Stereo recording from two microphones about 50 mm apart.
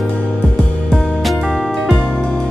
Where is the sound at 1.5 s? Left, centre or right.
Centre.